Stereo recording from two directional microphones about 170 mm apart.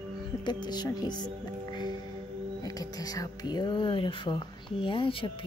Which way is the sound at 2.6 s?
20° left (ahead or behind).